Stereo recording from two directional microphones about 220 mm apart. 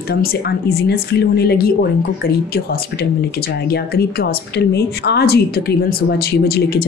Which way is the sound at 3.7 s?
45° left (ahead or behind).